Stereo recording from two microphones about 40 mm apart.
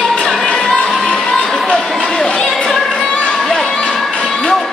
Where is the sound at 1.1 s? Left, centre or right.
Centre.